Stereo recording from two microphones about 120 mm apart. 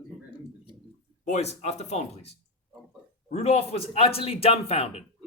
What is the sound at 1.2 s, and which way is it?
A man's voice, 70° left (ahead or behind).